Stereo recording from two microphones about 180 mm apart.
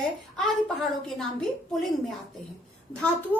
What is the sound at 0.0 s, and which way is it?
A woman's voice, centre (ahead or behind).